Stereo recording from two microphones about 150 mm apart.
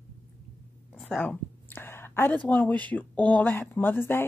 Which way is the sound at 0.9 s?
5° left (ahead or behind).